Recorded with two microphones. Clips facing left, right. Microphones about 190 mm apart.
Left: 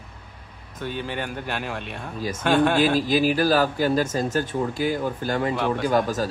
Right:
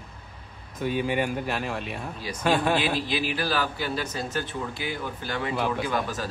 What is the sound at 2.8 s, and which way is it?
Speech, 45° left (ahead or behind).